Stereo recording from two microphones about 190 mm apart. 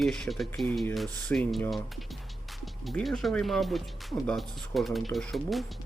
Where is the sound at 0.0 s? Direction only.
Centre (ahead or behind).